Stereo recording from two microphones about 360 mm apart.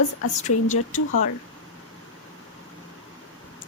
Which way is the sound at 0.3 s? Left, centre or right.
Centre.